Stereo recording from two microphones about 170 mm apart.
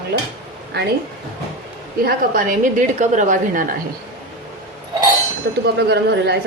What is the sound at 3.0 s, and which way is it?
Speech, 45° right (ahead or behind).